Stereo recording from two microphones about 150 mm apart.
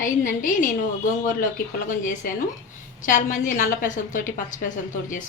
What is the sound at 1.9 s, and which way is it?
A woman's voice, 60° left (ahead or behind).